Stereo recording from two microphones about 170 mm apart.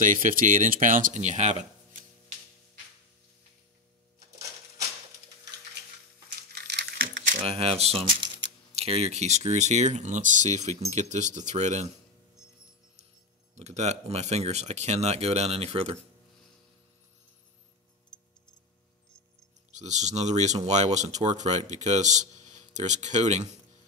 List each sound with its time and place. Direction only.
0.0 s speech: 50° right (ahead or behind)
6.5 s coin: 85° right
7.4 s speech: 35° right (ahead or behind)
13.6 s speech: 40° right (ahead or behind)
19.7 s speech: 45° right (ahead or behind)